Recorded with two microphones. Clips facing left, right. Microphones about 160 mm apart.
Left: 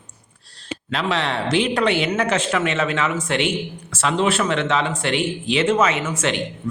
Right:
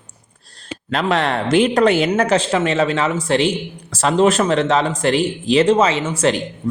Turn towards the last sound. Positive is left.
turn(degrees=-35)  # may be behind; listen again after turning